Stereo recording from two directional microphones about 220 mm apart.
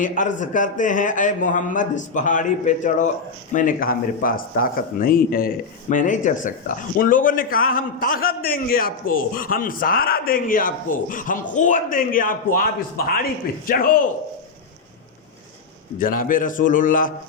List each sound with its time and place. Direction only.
0.0 s speech: 35° left (ahead or behind)
16.0 s speech: 40° left (ahead or behind)